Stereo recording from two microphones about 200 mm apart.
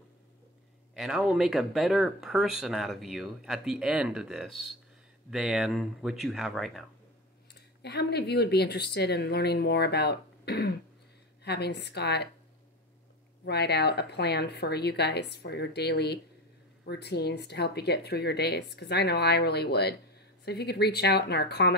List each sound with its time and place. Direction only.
0.9 s speech: centre (ahead or behind)
7.8 s speech: 55° left (ahead or behind)
13.5 s speech: 55° left (ahead or behind)